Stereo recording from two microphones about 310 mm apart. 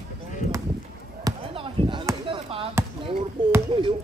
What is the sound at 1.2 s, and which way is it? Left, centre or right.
Basketball bounce, centre.